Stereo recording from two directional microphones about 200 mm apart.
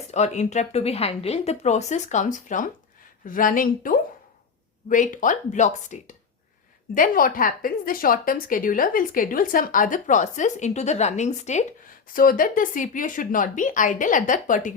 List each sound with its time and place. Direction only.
0.1 s a woman's voice: 35° left (ahead or behind)